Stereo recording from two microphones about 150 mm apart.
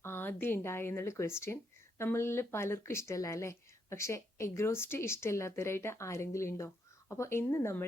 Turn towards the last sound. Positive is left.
turn(degrees=20)  # may be behind; listen again after turning